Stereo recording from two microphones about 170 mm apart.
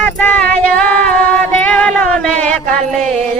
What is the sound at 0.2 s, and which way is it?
Female singing, 10° left (ahead or behind).